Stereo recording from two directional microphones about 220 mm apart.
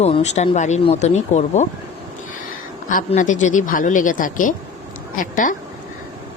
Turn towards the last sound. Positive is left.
turn(degrees=35)  # may be behind; listen again after turning